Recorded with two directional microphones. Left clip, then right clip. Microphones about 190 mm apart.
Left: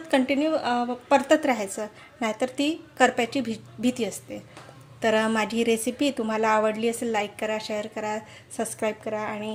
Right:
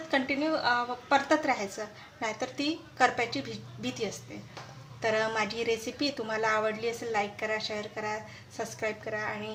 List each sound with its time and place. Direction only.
0.1 s a woman's voice: 40° left (ahead or behind)